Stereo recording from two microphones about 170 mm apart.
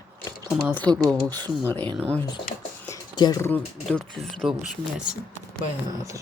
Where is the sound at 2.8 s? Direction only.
20° left (ahead or behind).